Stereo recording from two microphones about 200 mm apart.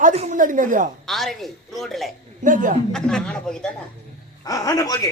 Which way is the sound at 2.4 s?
40° right (ahead or behind).